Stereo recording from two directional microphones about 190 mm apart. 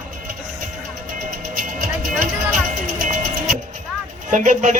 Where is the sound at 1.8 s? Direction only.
45° right (ahead or behind).